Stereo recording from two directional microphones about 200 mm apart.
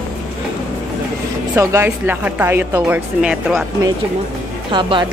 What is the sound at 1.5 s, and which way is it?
A woman's voice, 15° right (ahead or behind).